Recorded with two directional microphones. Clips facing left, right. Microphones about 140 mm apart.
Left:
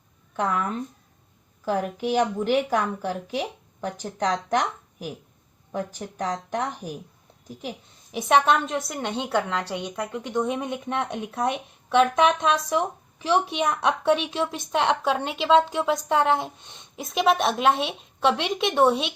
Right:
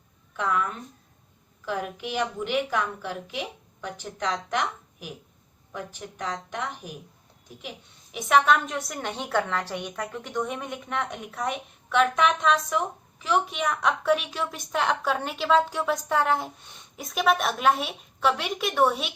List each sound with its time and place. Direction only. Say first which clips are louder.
0.3 s a woman's voice: left 2 dB; 40° left (ahead or behind)
8.1 s a woman's voice: left 1 dB; 30° left (ahead or behind)